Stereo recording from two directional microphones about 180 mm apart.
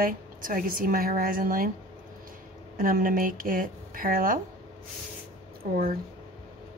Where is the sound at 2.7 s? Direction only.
50° right (ahead or behind).